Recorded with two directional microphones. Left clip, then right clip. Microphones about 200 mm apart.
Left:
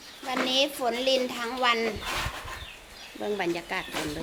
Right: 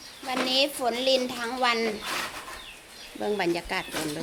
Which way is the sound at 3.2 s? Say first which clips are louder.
Right 2 dB; 25° right (ahead or behind).